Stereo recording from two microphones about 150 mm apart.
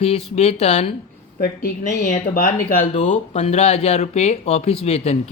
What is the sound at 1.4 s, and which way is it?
Speech, 75° left (ahead or behind).